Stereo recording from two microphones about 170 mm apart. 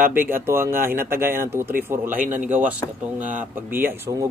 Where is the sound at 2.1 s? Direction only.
45° right (ahead or behind).